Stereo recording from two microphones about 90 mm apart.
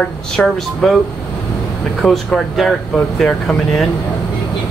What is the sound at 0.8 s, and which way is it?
Speech, 5° left (ahead or behind).